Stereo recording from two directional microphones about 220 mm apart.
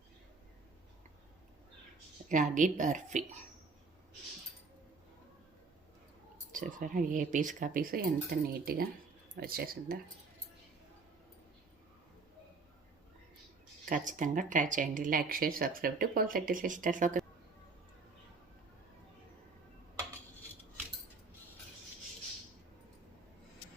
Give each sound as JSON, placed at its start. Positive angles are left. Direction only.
{"t": 2.3, "sound": "speech", "side_deg": -35}
{"t": 6.5, "sound": "speech", "side_deg": -35}
{"t": 13.8, "sound": "speech", "side_deg": -35}